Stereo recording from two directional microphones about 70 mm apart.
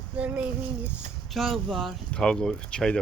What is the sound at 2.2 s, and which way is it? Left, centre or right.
Speech, centre.